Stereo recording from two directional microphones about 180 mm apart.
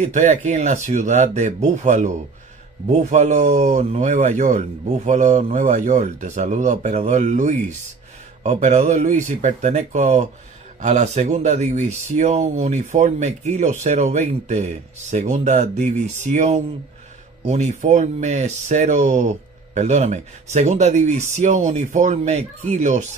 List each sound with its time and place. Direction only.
0.0 s speech: 40° right (ahead or behind)